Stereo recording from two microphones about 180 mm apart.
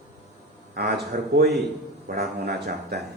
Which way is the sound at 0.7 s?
65° right (ahead or behind).